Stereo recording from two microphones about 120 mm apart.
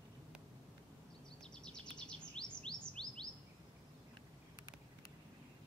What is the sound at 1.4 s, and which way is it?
Chirp, 5° left (ahead or behind).